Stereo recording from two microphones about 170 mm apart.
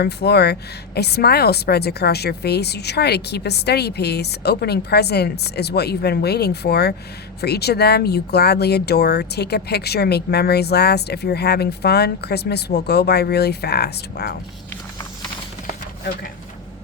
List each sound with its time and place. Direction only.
0.0 s speech: 70° left (ahead or behind)